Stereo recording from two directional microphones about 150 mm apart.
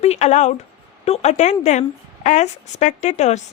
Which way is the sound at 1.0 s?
45° left (ahead or behind).